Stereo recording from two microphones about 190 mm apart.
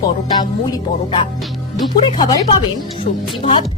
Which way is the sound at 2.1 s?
25° left (ahead or behind).